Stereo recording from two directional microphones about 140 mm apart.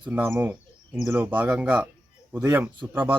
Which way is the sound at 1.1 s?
15° right (ahead or behind).